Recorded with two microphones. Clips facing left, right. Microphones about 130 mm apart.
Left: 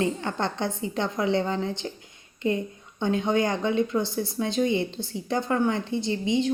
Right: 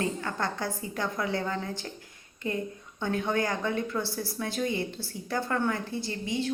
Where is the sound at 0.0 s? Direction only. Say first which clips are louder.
Left 4 dB; 25° left (ahead or behind).